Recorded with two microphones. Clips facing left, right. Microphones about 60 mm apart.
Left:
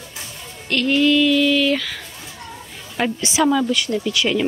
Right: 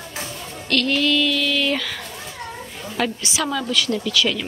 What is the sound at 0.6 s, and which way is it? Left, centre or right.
A woman's voice, centre.